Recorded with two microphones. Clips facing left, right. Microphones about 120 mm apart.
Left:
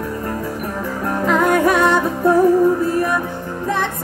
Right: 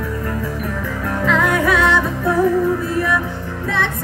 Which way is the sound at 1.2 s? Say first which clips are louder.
Left 2 dB; 45° left (ahead or behind).